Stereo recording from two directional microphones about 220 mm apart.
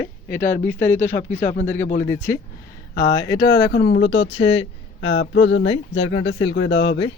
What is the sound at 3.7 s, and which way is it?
Speech, 55° left (ahead or behind).